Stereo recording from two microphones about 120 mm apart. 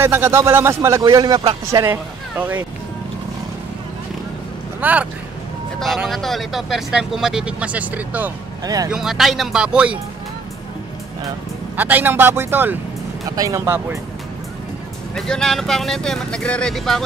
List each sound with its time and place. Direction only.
0.0 s speech: 20° right (ahead or behind)
1.0 s speech: 35° right (ahead or behind)
1.9 s speech: 15° right (ahead or behind)
4.7 s speech: 15° right (ahead or behind)
5.8 s speech: centre (ahead or behind)
8.6 s speech: 30° right (ahead or behind)
8.9 s speech: 5° right (ahead or behind)
11.7 s a man's voice: 15° right (ahead or behind)
15.1 s speech: 5° left (ahead or behind)